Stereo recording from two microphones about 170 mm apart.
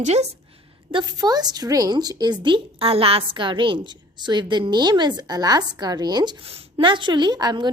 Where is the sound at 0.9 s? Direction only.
25° right (ahead or behind).